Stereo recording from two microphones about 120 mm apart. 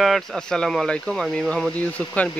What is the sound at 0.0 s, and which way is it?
Speech, centre (ahead or behind).